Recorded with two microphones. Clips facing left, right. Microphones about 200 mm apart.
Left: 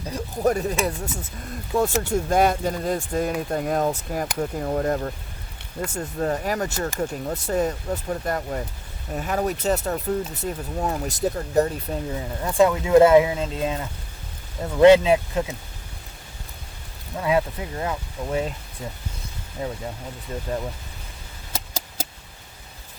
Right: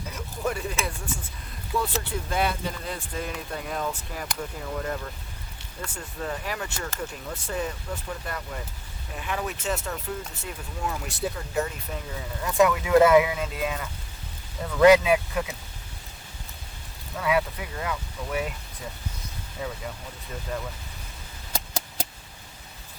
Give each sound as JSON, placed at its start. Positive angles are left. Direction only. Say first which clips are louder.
{"t": 0.1, "sound": "speech", "louder": "left 8 dB", "side_deg": 35}
{"t": 17.2, "sound": "speech", "louder": "left 3 dB", "side_deg": 30}
{"t": 19.6, "sound": "speech", "louder": "left 4 dB", "side_deg": 35}